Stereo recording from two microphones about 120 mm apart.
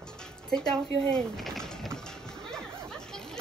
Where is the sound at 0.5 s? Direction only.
5° left (ahead or behind).